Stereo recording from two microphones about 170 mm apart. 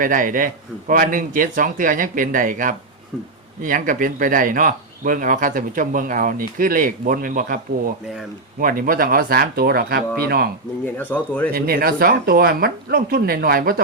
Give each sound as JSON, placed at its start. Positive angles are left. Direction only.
{"t": 0.0, "sound": "speech", "side_deg": -55}
{"t": 10.9, "sound": "speech", "side_deg": 10}
{"t": 11.5, "sound": "speech", "side_deg": -65}